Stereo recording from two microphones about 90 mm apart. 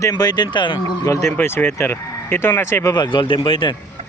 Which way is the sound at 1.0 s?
35° left (ahead or behind).